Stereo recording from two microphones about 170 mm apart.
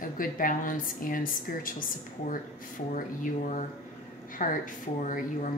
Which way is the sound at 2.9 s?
45° left (ahead or behind).